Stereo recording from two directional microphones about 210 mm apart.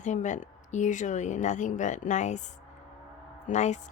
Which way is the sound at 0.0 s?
35° left (ahead or behind).